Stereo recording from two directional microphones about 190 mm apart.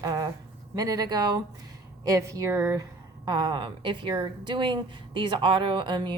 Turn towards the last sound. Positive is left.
turn(degrees=-25)  # may be behind; listen again after turning